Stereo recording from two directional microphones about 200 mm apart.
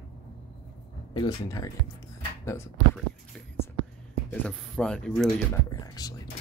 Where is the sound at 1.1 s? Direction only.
20° left (ahead or behind).